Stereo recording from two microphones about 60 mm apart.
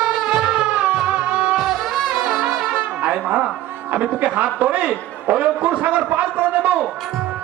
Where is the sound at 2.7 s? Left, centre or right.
Right.